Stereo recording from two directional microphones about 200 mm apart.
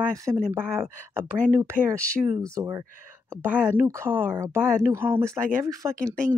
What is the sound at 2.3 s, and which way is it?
Speech, 15° right (ahead or behind).